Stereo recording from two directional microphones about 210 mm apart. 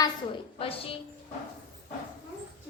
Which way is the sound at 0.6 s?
25° left (ahead or behind).